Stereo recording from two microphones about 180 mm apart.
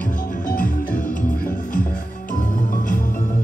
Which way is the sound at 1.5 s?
50° left (ahead or behind).